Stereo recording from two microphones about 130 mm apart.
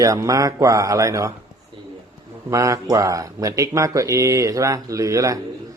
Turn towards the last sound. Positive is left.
turn(degrees=-25)  # may be behind; listen again after turning